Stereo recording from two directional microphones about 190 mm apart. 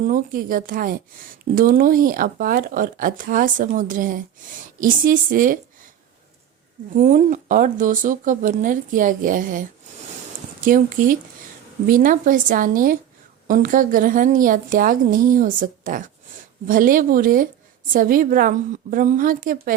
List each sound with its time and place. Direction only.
0.0 s speech: 45° right (ahead or behind)
6.9 s speech: 40° right (ahead or behind)
10.7 s speech: 45° right (ahead or behind)